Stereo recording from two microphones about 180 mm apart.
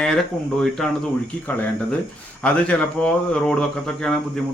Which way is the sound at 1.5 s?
10° left (ahead or behind).